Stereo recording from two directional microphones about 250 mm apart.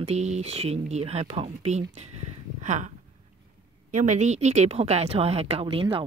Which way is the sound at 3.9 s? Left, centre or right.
Right.